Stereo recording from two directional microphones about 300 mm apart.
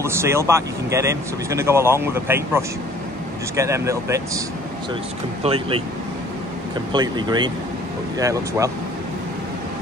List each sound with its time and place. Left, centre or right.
0.0 s speech: centre
5.4 s speech: centre
6.9 s speech: centre